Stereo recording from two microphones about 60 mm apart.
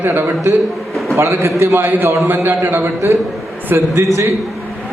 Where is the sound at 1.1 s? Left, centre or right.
Right.